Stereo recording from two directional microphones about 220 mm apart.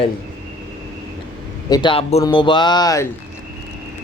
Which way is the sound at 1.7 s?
20° left (ahead or behind).